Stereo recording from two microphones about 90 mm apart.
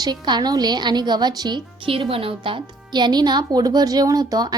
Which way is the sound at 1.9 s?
90° right.